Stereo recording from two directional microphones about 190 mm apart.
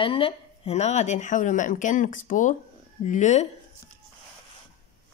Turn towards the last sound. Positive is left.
turn(degrees=40)  # may be behind; listen again after turning